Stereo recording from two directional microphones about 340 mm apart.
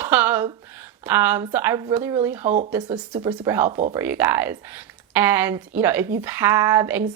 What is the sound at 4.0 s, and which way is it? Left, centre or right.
Speech, centre.